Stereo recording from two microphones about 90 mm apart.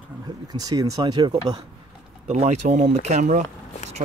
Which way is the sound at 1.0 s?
50° right (ahead or behind).